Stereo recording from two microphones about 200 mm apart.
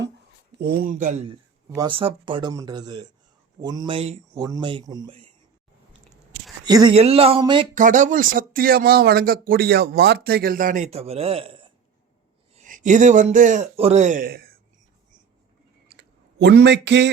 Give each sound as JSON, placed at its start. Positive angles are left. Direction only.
{"t": 0.6, "sound": "speech", "side_deg": -50}
{"t": 1.7, "sound": "speech", "side_deg": -20}
{"t": 4.4, "sound": "speech", "side_deg": -20}
{"t": 6.7, "sound": "speech", "side_deg": -20}
{"t": 7.8, "sound": "speech", "side_deg": -40}
{"t": 12.5, "sound": "speech", "side_deg": -40}
{"t": 15.9, "sound": "a sound", "side_deg": -55}